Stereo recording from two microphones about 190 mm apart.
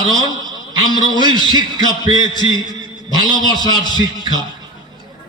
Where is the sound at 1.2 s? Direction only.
25° left (ahead or behind).